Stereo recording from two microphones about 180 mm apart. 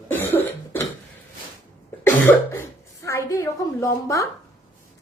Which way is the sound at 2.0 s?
10° left (ahead or behind).